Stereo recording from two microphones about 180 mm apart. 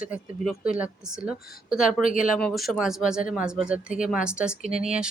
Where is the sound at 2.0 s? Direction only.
45° left (ahead or behind).